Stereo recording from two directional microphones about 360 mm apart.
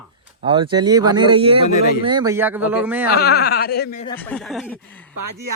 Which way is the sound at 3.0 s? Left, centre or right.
Left.